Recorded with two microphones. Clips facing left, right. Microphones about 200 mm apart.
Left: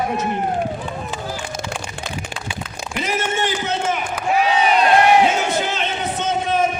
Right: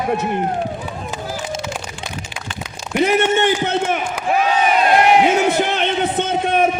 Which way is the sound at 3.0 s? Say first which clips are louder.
Right 7 dB; 60° right (ahead or behind).